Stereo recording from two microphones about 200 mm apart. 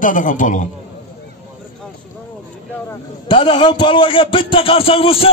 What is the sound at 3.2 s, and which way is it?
A man's voice, 25° left (ahead or behind).